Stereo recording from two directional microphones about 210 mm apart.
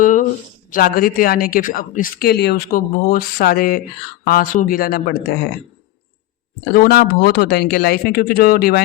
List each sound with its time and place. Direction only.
0.0 s a sound: 40° left (ahead or behind)
0.7 s a woman's voice: 45° left (ahead or behind)
6.7 s a woman's voice: 45° left (ahead or behind)